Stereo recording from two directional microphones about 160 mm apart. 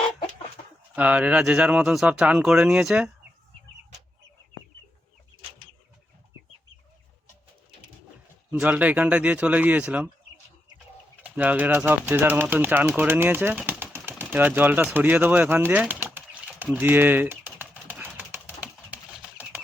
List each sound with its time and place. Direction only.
0.6 s chicken: 50° left (ahead or behind)
0.9 s speech: 10° right (ahead or behind)
8.5 s speech: 10° right (ahead or behind)
11.2 s speech: 10° right (ahead or behind)
13.0 s a sound: 10° right (ahead or behind)